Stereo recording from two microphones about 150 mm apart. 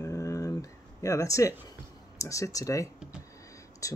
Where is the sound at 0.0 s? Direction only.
20° left (ahead or behind).